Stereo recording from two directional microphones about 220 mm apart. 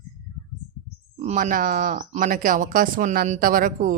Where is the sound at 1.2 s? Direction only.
35° right (ahead or behind).